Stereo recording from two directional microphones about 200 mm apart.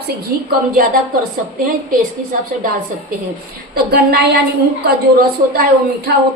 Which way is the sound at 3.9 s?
50° right (ahead or behind).